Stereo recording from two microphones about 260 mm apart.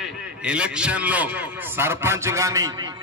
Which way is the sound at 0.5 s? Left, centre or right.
Centre.